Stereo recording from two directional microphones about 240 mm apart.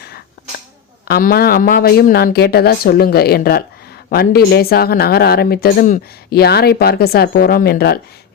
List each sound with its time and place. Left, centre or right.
1.0 s speech: left